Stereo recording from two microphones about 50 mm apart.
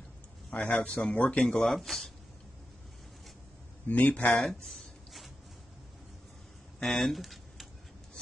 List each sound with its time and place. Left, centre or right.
0.5 s speech: left
1.4 s speech: centre
3.8 s speech: left
4.4 s a sound: centre
6.8 s speech: centre